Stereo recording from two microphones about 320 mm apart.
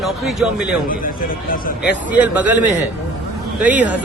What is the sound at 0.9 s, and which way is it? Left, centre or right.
Speech, left.